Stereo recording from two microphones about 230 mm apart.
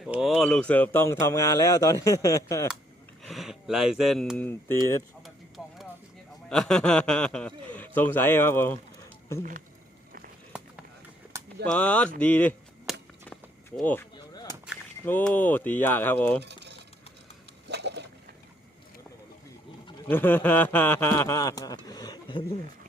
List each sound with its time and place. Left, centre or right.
0.0 s speech: centre
3.2 s speech: centre
5.2 s a sound: centre
6.5 s speech: centre
9.4 s speech: right
11.6 s speech: centre
12.9 s a sound: centre
15.0 s speech: centre
16.4 s a sound: right
20.1 s speech: centre